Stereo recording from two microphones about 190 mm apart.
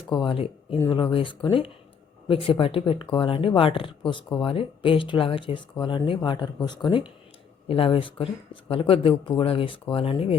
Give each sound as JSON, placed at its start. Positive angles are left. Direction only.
{"t": 0.1, "sound": "speech", "side_deg": 25}